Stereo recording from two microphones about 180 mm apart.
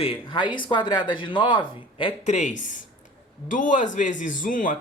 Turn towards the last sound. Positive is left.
turn(degrees=50)  # may be behind; listen again after turning